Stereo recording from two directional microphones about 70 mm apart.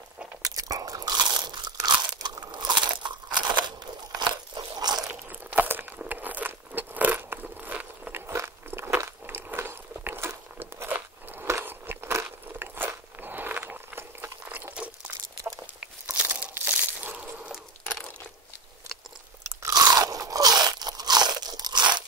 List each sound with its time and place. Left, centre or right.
0.4 s crunch: right
5.5 s a sound: right
8.3 s biting: right
15.8 s crunch: right
19.7 s crunch: right